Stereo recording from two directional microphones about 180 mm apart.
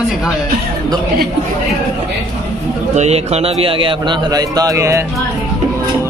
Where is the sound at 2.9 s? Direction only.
35° right (ahead or behind); by 5.1 s 15° right (ahead or behind).